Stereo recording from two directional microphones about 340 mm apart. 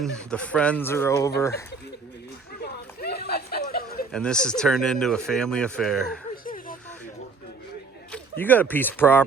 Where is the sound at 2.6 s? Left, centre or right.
Left.